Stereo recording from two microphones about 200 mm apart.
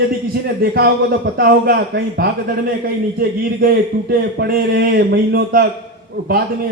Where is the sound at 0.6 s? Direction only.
50° right (ahead or behind).